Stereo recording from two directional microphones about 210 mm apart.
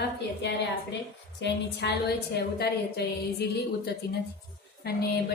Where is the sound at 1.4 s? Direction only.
55° left (ahead or behind).